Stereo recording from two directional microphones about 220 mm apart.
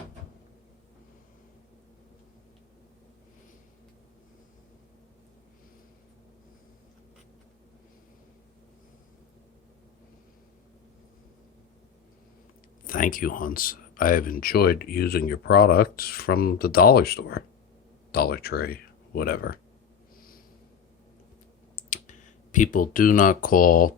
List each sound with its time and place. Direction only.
12.9 s speech: 40° left (ahead or behind)
21.8 s clicking: 35° left (ahead or behind)
22.5 s speech: 35° left (ahead or behind)